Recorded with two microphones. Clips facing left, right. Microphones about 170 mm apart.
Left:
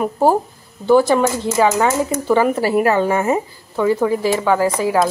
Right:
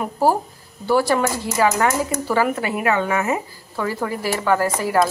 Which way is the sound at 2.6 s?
35° left (ahead or behind).